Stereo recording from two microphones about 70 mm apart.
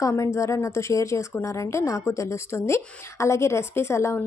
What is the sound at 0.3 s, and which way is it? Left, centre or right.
A woman's voice, left.